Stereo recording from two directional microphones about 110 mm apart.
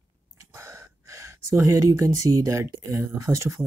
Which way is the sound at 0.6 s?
25° right (ahead or behind).